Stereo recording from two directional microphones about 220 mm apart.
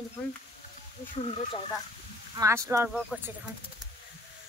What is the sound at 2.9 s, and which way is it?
Speech, centre (ahead or behind).